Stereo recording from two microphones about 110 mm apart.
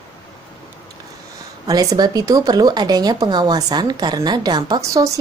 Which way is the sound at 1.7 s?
35° right (ahead or behind).